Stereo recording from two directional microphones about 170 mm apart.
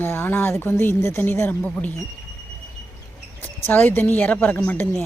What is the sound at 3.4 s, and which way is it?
A woman's voice, 10° left (ahead or behind).